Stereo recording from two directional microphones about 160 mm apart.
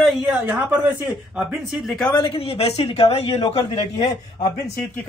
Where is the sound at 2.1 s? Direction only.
35° left (ahead or behind).